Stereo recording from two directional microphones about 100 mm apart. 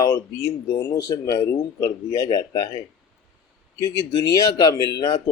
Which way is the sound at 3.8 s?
35° left (ahead or behind).